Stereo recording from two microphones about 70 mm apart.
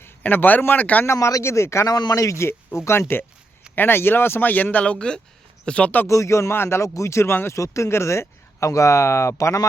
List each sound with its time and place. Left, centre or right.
0.0 s a man's voice: left
1.0 s speech: left
1.9 s speech: left
2.1 s speech: left
6.1 s speech: left
6.8 s speech: left